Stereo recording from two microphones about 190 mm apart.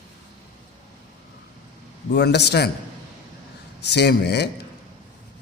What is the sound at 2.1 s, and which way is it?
Speech, 60° left (ahead or behind).